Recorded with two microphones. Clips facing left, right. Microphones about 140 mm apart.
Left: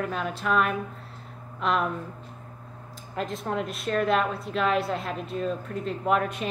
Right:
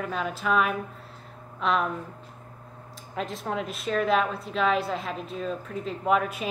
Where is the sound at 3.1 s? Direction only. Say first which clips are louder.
Left 1 dB; centre (ahead or behind).